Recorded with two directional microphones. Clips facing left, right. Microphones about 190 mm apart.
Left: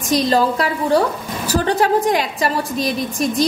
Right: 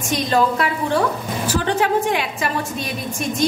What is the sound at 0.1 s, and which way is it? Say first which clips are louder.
A woman's voice: left 3 dB; 35° left (ahead or behind).